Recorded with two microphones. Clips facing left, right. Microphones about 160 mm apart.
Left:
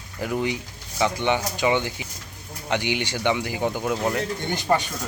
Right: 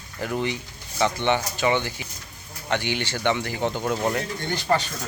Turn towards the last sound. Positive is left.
turn(degrees=15)  # may be behind; listen again after turning